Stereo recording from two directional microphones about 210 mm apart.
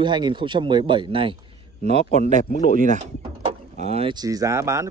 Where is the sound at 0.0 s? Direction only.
20° right (ahead or behind).